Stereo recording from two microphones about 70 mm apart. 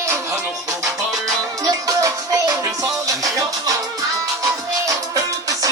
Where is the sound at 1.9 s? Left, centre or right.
Right.